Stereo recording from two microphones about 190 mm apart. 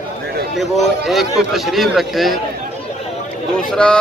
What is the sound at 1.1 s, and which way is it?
A man's voice, centre (ahead or behind).